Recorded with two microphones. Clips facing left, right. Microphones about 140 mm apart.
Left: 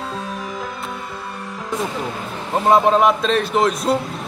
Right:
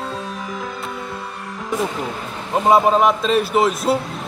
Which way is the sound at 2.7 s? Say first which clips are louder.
Even; centre (ahead or behind).